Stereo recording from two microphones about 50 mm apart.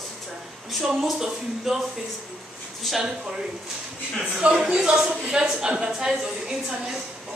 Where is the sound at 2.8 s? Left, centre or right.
Centre.